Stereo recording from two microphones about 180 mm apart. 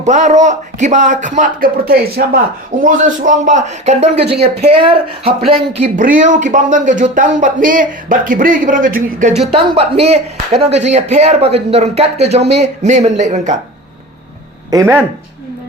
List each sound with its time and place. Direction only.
0.0 s speech: 40° right (ahead or behind); by 2.4 s 60° right (ahead or behind)
2.8 s speech: 45° right (ahead or behind); by 5.3 s 30° right (ahead or behind)
6.0 s speech: 50° right (ahead or behind)
9.5 s speech: 30° right (ahead or behind)
14.7 s speech: 15° right (ahead or behind)